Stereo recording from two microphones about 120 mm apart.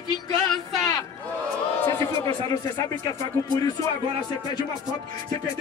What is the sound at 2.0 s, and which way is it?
Speech, 30° left (ahead or behind).